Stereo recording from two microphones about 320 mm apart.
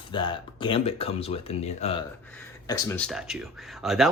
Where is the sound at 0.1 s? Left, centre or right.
Centre.